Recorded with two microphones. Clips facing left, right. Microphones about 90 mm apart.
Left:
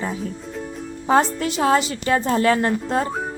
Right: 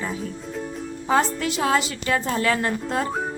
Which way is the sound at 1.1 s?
30° left (ahead or behind).